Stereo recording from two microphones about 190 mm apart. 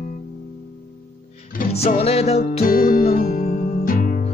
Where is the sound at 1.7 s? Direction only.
35° left (ahead or behind).